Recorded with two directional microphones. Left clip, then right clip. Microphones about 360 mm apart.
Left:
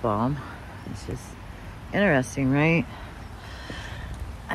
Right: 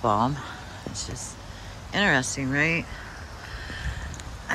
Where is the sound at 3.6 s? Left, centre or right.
Centre.